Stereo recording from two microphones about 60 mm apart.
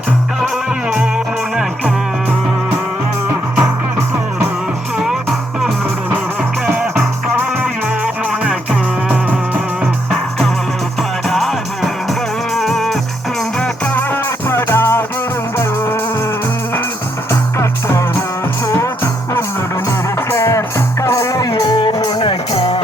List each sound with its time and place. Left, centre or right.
10.1 s music: centre
13.6 s music: left
17.6 s music: left
20.3 s music: left